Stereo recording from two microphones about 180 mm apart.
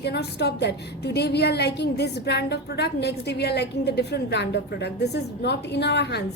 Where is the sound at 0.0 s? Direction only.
65° left (ahead or behind).